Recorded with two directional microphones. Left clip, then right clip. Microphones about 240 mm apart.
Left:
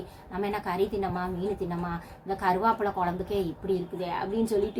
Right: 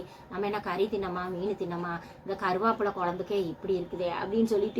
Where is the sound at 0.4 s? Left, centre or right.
Centre.